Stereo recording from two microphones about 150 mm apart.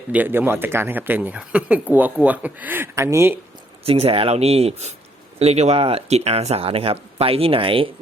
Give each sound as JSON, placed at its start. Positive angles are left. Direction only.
{"t": 0.1, "sound": "speech", "side_deg": -10}
{"t": 3.8, "sound": "speech", "side_deg": -40}